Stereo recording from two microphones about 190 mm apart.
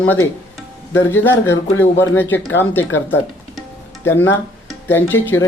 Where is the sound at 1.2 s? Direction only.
10° left (ahead or behind).